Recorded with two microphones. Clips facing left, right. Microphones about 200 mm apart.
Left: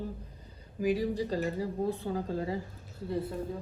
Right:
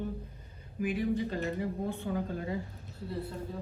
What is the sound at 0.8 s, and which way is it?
A woman's voice, 35° left (ahead or behind).